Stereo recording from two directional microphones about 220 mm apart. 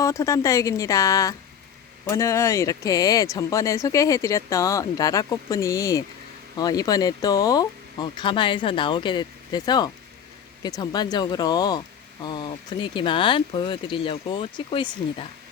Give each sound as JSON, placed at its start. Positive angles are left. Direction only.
{"t": 0.0, "sound": "speech", "side_deg": 15}